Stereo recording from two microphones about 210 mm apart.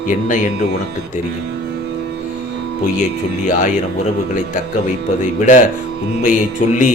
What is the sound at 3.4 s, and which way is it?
Speech, 35° left (ahead or behind).